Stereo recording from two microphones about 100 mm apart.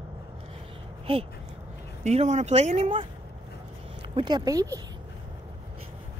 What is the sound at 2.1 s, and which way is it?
Speech, 90° right.